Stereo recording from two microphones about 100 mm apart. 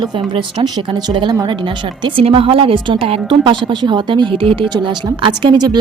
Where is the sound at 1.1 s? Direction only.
50° right (ahead or behind).